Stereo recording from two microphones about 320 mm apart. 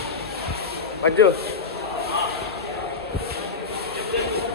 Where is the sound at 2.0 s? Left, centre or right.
Right.